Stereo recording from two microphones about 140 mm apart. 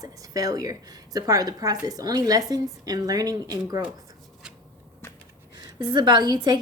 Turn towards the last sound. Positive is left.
turn(degrees=-30)  # may be behind; listen again after turning